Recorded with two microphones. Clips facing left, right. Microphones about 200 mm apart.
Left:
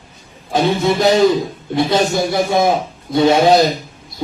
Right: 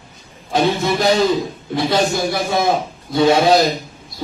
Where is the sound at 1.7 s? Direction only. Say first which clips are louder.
Left 2 dB; 20° left (ahead or behind).